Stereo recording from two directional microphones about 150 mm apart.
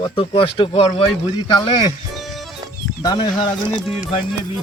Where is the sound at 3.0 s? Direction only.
25° left (ahead or behind).